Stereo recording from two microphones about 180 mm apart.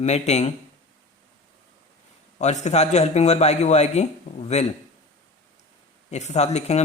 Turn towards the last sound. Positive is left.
turn(degrees=40)  # may be behind; listen again after turning